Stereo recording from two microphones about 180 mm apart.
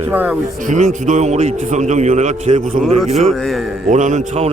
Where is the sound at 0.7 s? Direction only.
45° right (ahead or behind).